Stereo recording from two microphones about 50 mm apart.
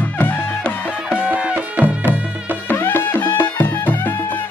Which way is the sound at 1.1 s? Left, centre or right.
Right.